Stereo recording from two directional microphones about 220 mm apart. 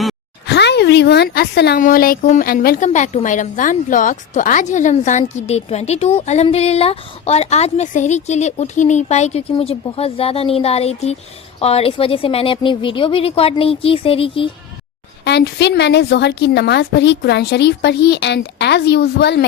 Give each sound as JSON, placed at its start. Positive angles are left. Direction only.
{"t": 0.4, "sound": "a woman's voice", "side_deg": 50}
{"t": 15.2, "sound": "a woman's voice", "side_deg": 50}